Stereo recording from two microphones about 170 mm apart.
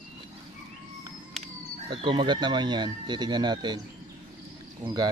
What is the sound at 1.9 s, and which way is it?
Speech, 25° right (ahead or behind).